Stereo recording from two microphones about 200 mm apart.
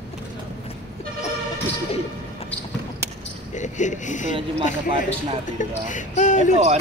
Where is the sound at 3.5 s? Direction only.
35° left (ahead or behind).